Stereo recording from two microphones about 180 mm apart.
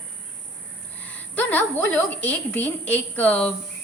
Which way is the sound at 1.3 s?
10° left (ahead or behind).